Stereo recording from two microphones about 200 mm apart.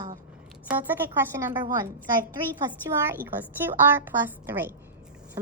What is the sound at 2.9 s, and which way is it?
Speech, 10° right (ahead or behind).